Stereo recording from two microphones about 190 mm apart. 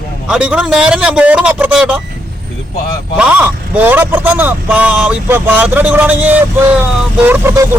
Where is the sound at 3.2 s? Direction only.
10° right (ahead or behind).